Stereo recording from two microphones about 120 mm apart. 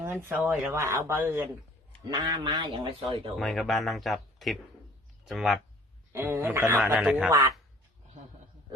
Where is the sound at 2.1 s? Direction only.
35° right (ahead or behind).